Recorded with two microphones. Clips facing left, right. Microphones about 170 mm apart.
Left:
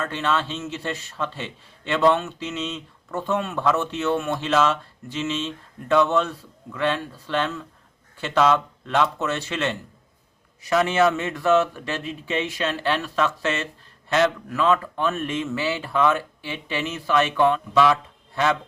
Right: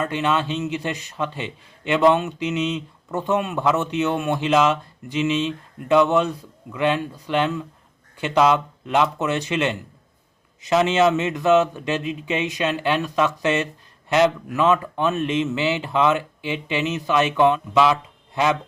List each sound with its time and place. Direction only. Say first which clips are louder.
0.0 s a man's voice: right 3 dB; 15° right (ahead or behind)